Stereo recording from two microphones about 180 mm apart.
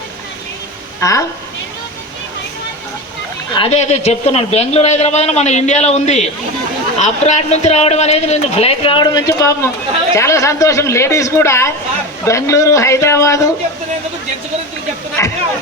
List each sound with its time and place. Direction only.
0.9 s a woman's voice: 15° left (ahead or behind)
3.5 s a man's voice: 35° left (ahead or behind); by 13.5 s 15° left (ahead or behind)
15.2 s speech: 15° left (ahead or behind)